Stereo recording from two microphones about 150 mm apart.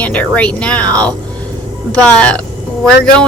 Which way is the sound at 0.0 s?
10° left (ahead or behind).